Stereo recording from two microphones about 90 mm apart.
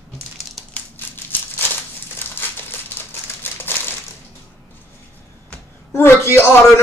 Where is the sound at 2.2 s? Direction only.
25° left (ahead or behind).